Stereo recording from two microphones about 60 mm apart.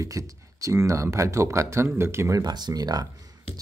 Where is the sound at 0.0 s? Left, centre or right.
Right.